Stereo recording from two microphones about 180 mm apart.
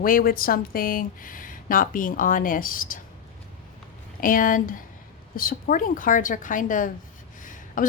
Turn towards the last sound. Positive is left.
turn(degrees=45)  # may be behind; listen again after turning